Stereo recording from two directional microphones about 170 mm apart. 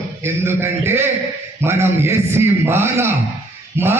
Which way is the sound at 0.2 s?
15° right (ahead or behind).